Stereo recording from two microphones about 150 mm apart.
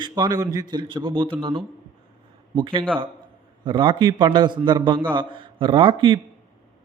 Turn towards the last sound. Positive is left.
turn(degrees=-35)  # may be behind; listen again after turning